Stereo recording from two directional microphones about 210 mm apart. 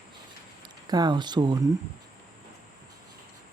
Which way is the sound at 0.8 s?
20° right (ahead or behind).